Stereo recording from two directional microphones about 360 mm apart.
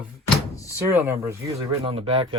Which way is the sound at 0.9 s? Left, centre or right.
Centre.